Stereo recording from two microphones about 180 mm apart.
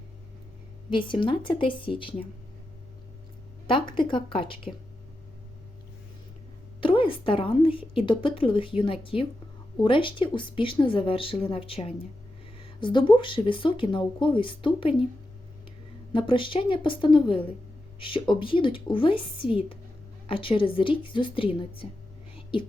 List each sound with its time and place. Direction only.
0.9 s speech: 25° left (ahead or behind)
3.7 s speech: 30° left (ahead or behind)
6.8 s speech: 30° left (ahead or behind)
16.1 s speech: 30° left (ahead or behind)